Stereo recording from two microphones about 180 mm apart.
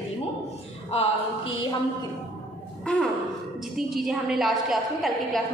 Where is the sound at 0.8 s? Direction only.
30° left (ahead or behind).